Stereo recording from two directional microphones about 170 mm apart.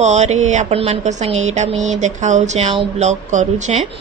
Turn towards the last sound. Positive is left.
turn(degrees=-45)  # may be behind; listen again after turning